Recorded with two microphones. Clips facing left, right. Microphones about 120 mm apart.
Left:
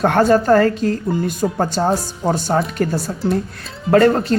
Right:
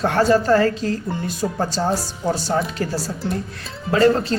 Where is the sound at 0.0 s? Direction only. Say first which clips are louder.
Left 3 dB; 55° left (ahead or behind).